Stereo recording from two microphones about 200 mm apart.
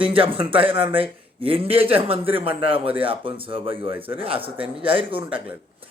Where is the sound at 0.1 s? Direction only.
25° right (ahead or behind).